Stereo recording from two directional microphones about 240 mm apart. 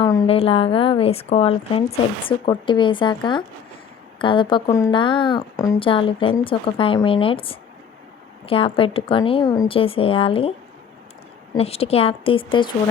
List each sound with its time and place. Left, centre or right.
0.0 s a woman's voice: centre
11.5 s a woman's voice: left